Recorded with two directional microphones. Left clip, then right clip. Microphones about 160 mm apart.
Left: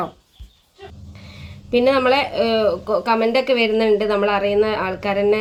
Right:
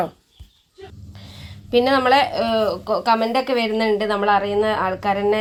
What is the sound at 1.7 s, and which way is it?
Speech, 30° right (ahead or behind).